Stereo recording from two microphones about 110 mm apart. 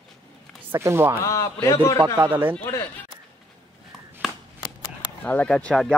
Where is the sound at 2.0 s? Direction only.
45° right (ahead or behind).